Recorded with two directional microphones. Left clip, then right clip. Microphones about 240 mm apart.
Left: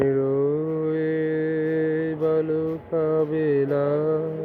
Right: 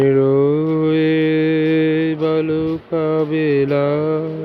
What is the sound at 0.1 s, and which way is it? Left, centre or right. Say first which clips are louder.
Mantra: right 8 dB; right.